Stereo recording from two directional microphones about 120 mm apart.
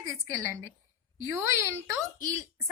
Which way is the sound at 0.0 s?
25° right (ahead or behind).